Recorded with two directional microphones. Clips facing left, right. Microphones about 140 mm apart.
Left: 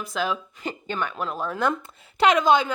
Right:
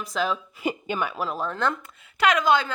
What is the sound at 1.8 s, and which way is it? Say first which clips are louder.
Speech: left 3 dB; 25° left (ahead or behind).